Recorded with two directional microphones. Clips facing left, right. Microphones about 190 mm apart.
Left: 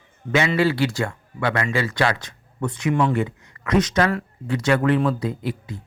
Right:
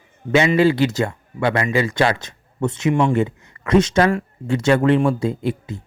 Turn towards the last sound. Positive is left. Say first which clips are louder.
# right 5 dB
turn(degrees=-25)  # may be behind; listen again after turning